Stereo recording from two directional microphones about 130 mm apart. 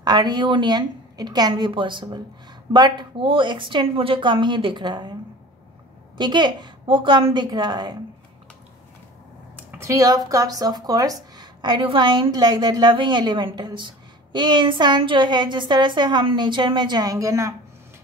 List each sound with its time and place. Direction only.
0.0 s speech: 35° right (ahead or behind)
6.1 s speech: 35° right (ahead or behind)
9.7 s speech: 20° right (ahead or behind)